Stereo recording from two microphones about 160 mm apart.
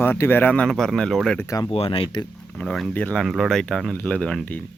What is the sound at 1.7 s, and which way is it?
Speech, 35° left (ahead or behind).